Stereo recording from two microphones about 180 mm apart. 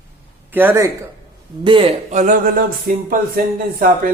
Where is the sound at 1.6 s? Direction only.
25° right (ahead or behind).